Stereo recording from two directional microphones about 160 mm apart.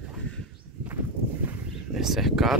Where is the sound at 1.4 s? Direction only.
Centre (ahead or behind).